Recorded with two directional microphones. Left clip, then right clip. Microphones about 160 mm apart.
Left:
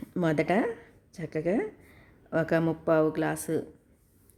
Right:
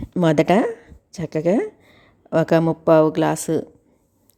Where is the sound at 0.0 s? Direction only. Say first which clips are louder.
Right 10 dB; 40° right (ahead or behind).